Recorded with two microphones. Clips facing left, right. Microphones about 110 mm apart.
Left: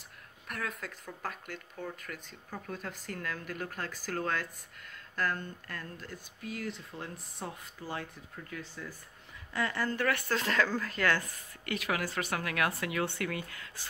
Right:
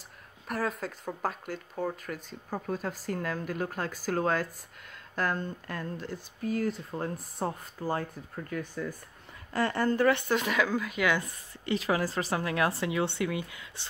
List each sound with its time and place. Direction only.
0.5 s speech: 35° right (ahead or behind); by 8.9 s 55° right (ahead or behind)
9.5 s speech: 40° right (ahead or behind)
9.9 s a woman's voice: 25° right (ahead or behind)
11.2 s a woman's voice: 25° right (ahead or behind)